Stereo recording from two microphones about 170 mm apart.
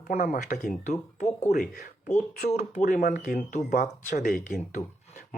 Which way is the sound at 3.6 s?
60° left (ahead or behind).